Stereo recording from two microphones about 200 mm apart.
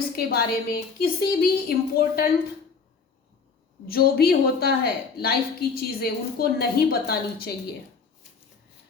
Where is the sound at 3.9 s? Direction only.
50° left (ahead or behind).